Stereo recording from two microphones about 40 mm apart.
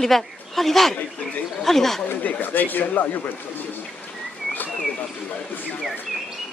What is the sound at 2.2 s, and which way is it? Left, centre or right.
A man's voice, left.